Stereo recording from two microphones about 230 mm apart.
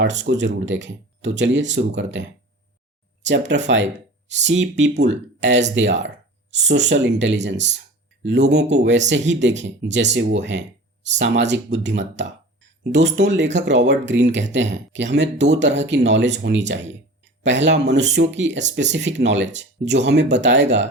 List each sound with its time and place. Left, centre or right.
0.0 s speech: right
3.2 s speech: right